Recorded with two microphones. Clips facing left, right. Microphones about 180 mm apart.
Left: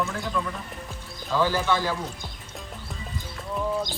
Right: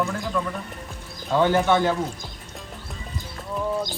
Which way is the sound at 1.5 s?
20° right (ahead or behind).